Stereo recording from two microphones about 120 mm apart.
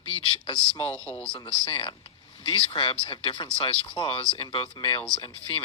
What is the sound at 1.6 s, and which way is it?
Speech, 45° left (ahead or behind).